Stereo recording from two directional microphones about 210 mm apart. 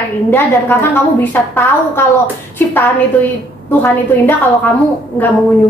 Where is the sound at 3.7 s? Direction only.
10° left (ahead or behind).